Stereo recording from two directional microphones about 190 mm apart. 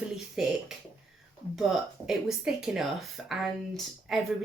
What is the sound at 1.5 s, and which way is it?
A woman's voice, centre (ahead or behind).